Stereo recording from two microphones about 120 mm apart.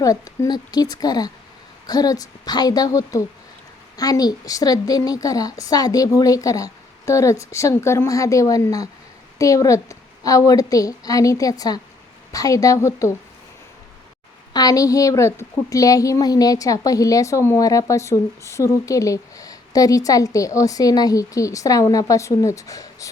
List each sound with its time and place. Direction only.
0.0 s a woman's voice: 30° left (ahead or behind)
14.5 s a woman's voice: 30° left (ahead or behind)